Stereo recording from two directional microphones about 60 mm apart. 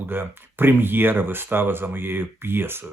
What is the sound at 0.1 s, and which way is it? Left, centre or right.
Speech, right.